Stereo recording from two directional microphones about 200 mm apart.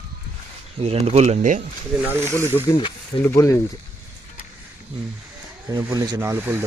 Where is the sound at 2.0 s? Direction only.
10° right (ahead or behind).